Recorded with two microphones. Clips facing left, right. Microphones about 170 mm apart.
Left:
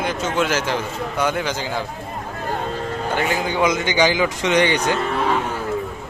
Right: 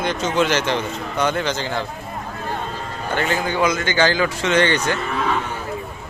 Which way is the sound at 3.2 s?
10° left (ahead or behind).